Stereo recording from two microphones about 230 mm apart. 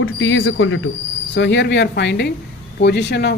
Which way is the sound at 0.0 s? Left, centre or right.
Left.